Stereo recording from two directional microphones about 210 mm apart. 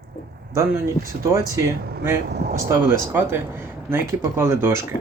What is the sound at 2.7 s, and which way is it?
Speech, 10° right (ahead or behind).